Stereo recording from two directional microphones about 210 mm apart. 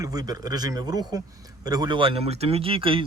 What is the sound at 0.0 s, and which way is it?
Speech, 15° right (ahead or behind).